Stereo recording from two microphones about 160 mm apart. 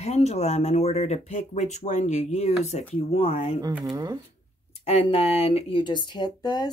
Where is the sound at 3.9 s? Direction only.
25° right (ahead or behind).